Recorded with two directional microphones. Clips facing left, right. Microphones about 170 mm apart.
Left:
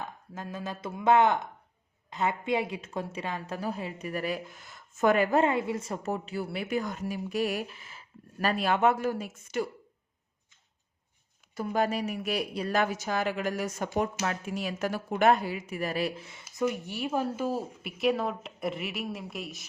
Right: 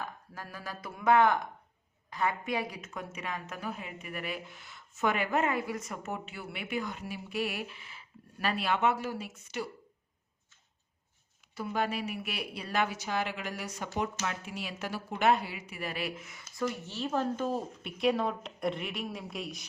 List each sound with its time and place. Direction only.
0.0 s a woman's voice: 20° left (ahead or behind); by 9.6 s 50° left (ahead or behind)
11.5 s a woman's voice: 45° left (ahead or behind); by 16.6 s 30° left (ahead or behind)
16.6 s speech: 15° left (ahead or behind)